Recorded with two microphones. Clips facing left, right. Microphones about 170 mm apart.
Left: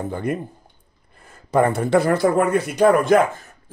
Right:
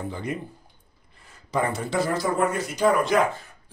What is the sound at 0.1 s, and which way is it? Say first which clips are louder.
Speech: left 6 dB; 55° left (ahead or behind).